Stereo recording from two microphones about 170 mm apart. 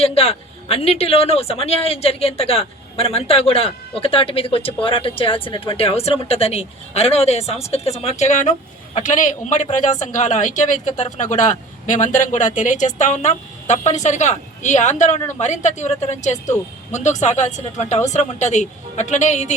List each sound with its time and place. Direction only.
0.0 s a man's voice: 35° left (ahead or behind)